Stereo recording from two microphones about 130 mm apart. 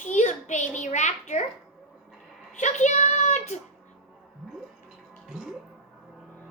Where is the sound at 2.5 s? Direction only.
65° left (ahead or behind).